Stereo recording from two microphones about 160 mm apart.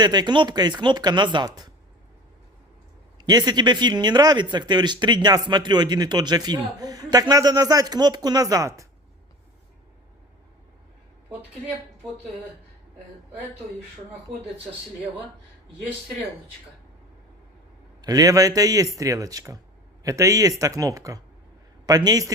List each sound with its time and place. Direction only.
0.0 s speech: 25° right (ahead or behind)
3.2 s speech: 25° right (ahead or behind)
18.0 s speech: 20° right (ahead or behind)